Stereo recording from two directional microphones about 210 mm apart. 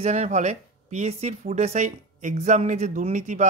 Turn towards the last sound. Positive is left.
turn(degrees=-35)  # may be behind; listen again after turning